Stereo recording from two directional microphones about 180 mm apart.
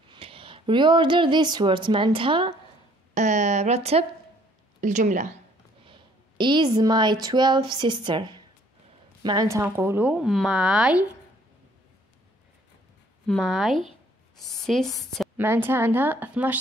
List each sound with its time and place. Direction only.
0.1 s speech: 30° right (ahead or behind)
3.2 s a woman's voice: 40° right (ahead or behind)
5.9 s a sound: 25° right (ahead or behind)
7.2 s a woman's voice: 25° right (ahead or behind); by 11.1 s 5° right (ahead or behind)
13.3 s a woman's voice: centre (ahead or behind)
15.3 s a woman's voice: 10° right (ahead or behind)